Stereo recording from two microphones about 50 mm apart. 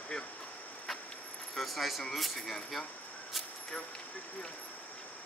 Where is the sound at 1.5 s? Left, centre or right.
Centre.